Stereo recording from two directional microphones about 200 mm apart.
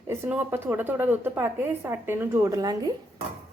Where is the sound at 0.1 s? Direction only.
10° right (ahead or behind).